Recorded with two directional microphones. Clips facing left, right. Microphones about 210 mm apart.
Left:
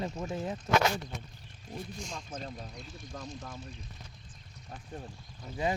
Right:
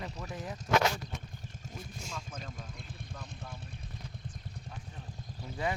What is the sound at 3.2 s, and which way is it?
Speech, 60° right (ahead or behind).